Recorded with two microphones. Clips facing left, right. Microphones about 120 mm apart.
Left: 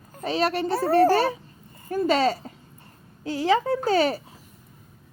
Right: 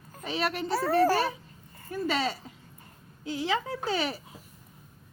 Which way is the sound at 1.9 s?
45° left (ahead or behind).